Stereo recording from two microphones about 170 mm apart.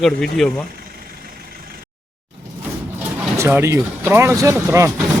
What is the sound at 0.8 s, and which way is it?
Vehicle, 60° right (ahead or behind).